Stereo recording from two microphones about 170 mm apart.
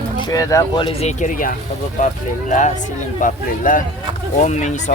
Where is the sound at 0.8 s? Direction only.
40° left (ahead or behind).